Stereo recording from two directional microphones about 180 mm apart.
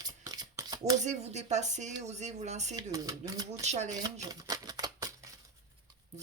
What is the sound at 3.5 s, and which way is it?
Speech, 40° right (ahead or behind).